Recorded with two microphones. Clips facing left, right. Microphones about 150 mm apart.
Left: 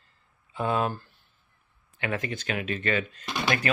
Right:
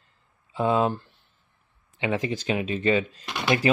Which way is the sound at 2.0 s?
25° right (ahead or behind).